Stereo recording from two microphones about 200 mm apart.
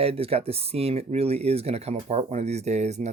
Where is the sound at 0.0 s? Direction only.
30° right (ahead or behind).